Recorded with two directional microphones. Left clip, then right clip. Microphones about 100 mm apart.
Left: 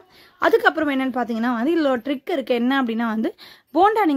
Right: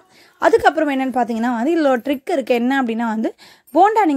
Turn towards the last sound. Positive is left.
turn(degrees=-30)  # may be behind; listen again after turning